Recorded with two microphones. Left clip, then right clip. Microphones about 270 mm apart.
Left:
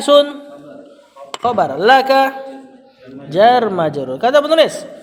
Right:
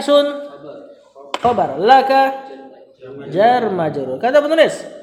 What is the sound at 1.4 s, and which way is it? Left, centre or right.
Speech, left.